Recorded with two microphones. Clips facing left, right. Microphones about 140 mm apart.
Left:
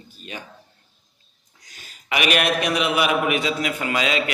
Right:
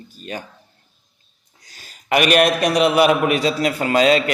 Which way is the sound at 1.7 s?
40° right (ahead or behind).